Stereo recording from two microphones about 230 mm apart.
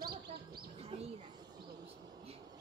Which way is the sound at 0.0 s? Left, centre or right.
Right.